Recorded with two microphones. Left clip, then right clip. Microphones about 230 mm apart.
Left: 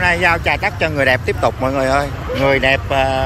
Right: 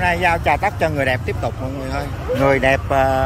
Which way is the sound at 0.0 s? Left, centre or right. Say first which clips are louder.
Left 2 dB; centre.